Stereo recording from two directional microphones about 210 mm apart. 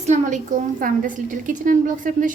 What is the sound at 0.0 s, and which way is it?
A woman's voice, 35° right (ahead or behind).